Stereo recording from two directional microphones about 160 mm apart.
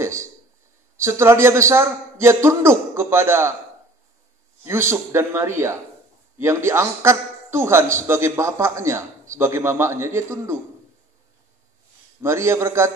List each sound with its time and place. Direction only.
0.0 s a sound: 15° right (ahead or behind)
0.9 s a man's voice: 15° right (ahead or behind)
4.6 s a man's voice: 15° right (ahead or behind)
12.2 s a man's voice: 15° right (ahead or behind)